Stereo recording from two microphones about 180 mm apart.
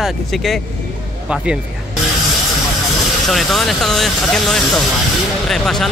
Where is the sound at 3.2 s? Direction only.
Centre (ahead or behind).